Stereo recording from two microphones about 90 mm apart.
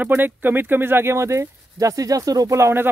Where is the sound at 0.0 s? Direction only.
20° right (ahead or behind).